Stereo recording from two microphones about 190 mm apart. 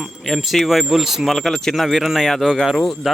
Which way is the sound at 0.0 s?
Centre (ahead or behind).